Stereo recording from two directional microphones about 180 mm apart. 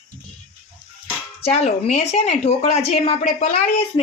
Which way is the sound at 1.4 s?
35° left (ahead or behind).